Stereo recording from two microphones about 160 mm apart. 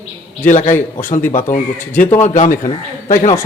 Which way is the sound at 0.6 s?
35° left (ahead or behind).